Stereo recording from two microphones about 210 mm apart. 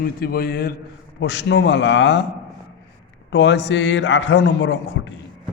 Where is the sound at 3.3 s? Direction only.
55° left (ahead or behind).